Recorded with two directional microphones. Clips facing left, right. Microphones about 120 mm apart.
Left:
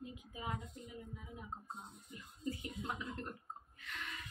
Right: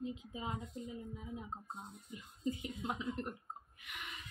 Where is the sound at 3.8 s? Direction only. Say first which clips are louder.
Left 5 dB; 15° right (ahead or behind).